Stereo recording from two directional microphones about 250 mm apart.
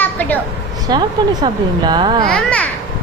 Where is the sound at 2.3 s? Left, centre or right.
Centre.